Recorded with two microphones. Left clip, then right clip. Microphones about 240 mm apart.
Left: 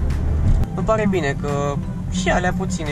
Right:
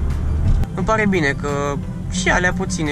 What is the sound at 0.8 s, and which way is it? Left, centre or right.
Speech, right.